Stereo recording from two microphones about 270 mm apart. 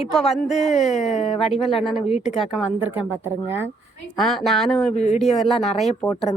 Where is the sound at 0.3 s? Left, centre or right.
Left.